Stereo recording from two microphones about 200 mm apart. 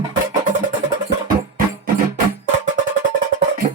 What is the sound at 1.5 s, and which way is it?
Music, 45° right (ahead or behind).